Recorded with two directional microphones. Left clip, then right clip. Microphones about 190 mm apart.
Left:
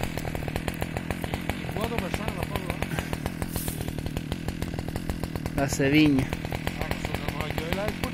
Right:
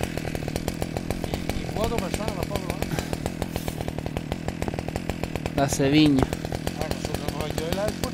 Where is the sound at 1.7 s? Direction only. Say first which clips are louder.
Right 4 dB; 50° right (ahead or behind).